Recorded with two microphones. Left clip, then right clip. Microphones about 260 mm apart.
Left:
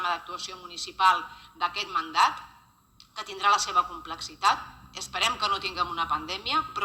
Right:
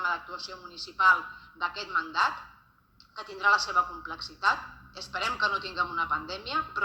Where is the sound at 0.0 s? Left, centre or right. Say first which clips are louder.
Left 1 dB; centre.